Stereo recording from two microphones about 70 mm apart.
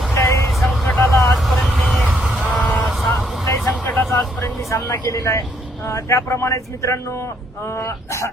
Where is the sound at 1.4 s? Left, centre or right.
Centre.